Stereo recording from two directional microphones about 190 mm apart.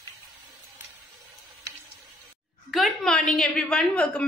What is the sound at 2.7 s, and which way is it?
A woman's voice, centre (ahead or behind).